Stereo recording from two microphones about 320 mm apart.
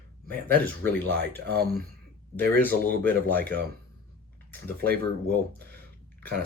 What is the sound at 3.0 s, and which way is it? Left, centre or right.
Speech, centre.